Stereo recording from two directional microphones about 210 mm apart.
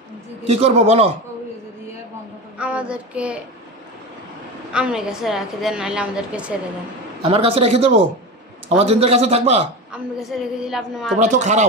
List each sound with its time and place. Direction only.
0.5 s a man's voice: 30° right (ahead or behind)
2.6 s a woman's voice: 5° right (ahead or behind)
4.7 s a woman's voice: 5° right (ahead or behind)
7.2 s a man's voice: 25° right (ahead or behind)
10.1 s a woman's voice: centre (ahead or behind)
11.1 s speech: 35° right (ahead or behind)